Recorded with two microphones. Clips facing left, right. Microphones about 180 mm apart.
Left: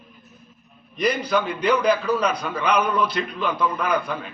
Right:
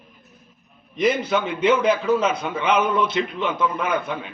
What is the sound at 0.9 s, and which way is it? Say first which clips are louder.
A man's voice: right 1 dB; 25° right (ahead or behind).